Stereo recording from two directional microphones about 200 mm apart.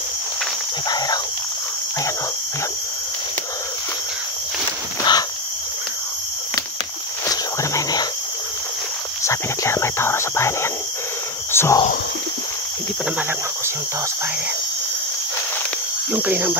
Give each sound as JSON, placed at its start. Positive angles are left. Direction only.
{"t": 0.8, "sound": "a sound", "side_deg": 20}
{"t": 5.1, "sound": "cricket", "side_deg": 20}
{"t": 7.2, "sound": "whispering", "side_deg": 20}
{"t": 9.2, "sound": "speech", "side_deg": 15}
{"t": 16.1, "sound": "speech", "side_deg": -10}